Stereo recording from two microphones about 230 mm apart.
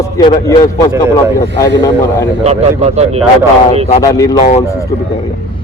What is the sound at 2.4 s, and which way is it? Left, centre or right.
Speech, right.